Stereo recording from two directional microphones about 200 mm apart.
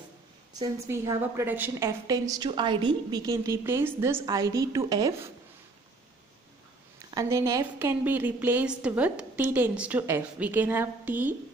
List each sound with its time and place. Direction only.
0.6 s a woman's voice: 15° right (ahead or behind)
7.2 s a woman's voice: 15° right (ahead or behind)